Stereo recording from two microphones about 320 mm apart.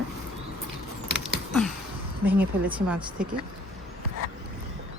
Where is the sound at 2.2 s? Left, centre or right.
Centre.